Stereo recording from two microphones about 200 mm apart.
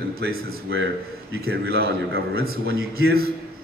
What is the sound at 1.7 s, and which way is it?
Speech, 50° right (ahead or behind).